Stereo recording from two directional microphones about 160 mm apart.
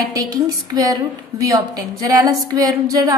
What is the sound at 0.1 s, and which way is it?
A woman's voice, 20° right (ahead or behind).